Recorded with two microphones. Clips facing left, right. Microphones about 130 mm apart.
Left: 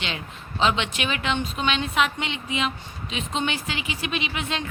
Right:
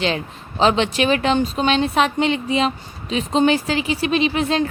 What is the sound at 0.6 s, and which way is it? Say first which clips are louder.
Speech: right 7 dB; 35° right (ahead or behind).